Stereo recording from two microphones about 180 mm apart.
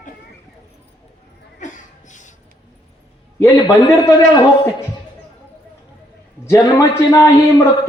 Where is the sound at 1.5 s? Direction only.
45° left (ahead or behind).